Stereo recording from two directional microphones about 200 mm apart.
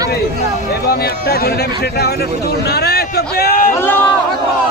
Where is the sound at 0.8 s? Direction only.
50° left (ahead or behind).